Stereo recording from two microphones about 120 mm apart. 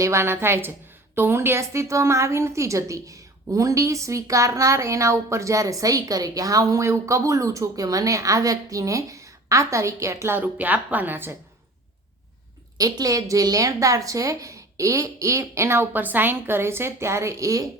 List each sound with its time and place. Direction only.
0.0 s a woman's voice: 20° right (ahead or behind)
12.7 s a woman's voice: 30° right (ahead or behind)